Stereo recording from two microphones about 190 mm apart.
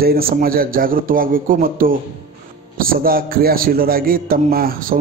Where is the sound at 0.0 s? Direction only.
50° right (ahead or behind).